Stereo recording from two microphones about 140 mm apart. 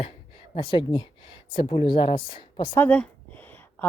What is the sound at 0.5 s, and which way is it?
A woman's voice, 35° left (ahead or behind).